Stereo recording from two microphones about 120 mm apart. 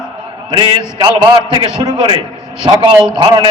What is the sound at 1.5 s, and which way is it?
A man's voice, 40° right (ahead or behind).